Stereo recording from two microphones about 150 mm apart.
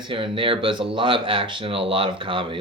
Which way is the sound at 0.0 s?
35° right (ahead or behind).